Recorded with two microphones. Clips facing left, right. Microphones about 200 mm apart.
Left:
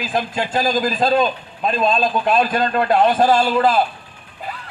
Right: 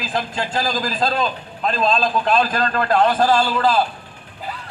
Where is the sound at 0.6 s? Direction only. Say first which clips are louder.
Left 4 dB; 20° left (ahead or behind).